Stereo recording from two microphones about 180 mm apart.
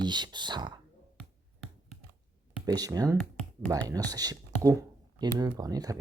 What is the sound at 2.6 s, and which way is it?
Speech, 20° right (ahead or behind).